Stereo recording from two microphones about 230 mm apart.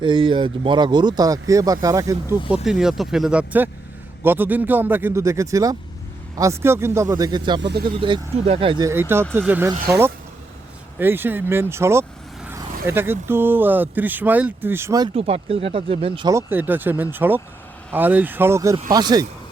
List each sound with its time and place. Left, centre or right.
0.0 s speech: right
2.6 s speech: centre